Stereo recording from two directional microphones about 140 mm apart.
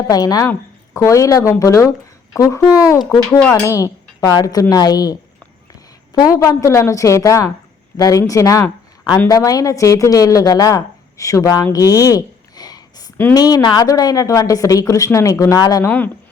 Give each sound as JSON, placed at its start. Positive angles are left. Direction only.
{"t": 0.1, "sound": "speech", "side_deg": 25}
{"t": 3.0, "sound": "speech", "side_deg": 0}
{"t": 3.5, "sound": "speech", "side_deg": 25}
{"t": 6.1, "sound": "speech", "side_deg": 25}